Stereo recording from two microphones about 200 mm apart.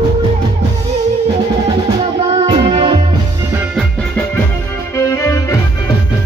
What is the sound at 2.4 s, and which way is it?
Music, 25° right (ahead or behind).